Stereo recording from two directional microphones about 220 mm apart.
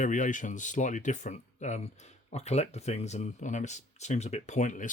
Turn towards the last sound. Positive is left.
turn(degrees=35)  # may be behind; listen again after turning